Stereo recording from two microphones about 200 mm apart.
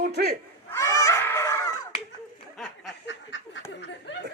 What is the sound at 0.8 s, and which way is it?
Honk, 20° left (ahead or behind).